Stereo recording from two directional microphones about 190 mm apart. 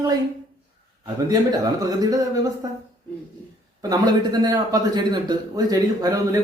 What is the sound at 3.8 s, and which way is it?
Speech, 20° right (ahead or behind).